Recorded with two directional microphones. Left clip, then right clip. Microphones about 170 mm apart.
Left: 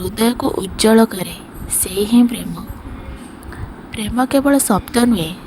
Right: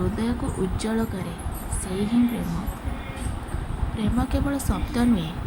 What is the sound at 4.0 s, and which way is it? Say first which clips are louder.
A woman's voice: left 11 dB; 50° left (ahead or behind).